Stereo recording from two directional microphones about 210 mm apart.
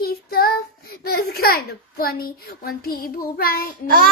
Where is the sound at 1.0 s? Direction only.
45° left (ahead or behind).